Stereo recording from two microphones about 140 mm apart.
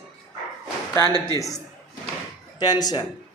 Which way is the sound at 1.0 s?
30° right (ahead or behind).